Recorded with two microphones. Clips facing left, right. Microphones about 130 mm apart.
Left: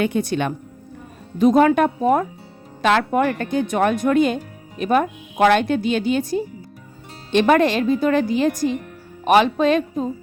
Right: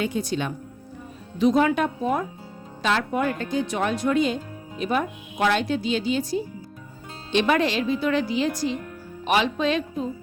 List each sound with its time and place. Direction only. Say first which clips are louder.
0.0 s speech: left 5 dB; 60° left (ahead or behind)
1.4 s speech: left 5 dB; 50° left (ahead or behind)
2.8 s speech: left 6 dB; 65° left (ahead or behind); by 10.1 s 45° left (ahead or behind)